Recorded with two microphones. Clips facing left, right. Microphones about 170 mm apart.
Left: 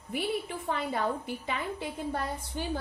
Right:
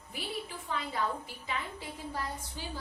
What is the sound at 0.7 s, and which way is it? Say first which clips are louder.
A woman's voice: left 4 dB; 60° left (ahead or behind).